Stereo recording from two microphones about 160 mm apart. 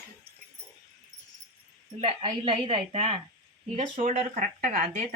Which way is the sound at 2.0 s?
30° right (ahead or behind).